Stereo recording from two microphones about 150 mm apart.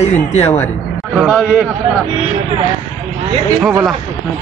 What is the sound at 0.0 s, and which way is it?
Speech, 45° left (ahead or behind).